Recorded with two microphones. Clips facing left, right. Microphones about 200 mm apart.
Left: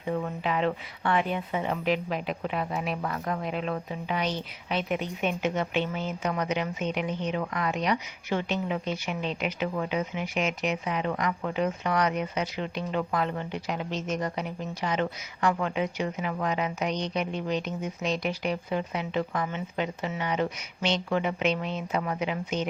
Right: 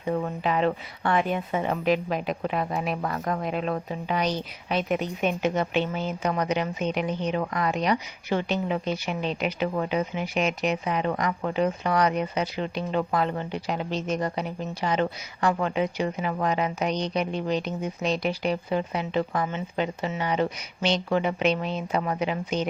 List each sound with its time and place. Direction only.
0.0 s speech: 40° right (ahead or behind)